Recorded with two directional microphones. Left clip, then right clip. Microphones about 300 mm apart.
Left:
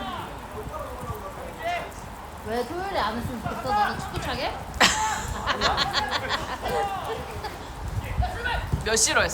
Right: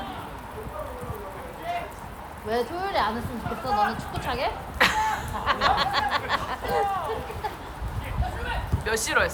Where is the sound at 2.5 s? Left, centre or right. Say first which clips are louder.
Right 2 dB; right.